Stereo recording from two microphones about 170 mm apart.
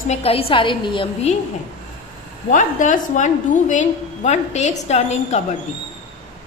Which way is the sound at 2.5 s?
50° left (ahead or behind).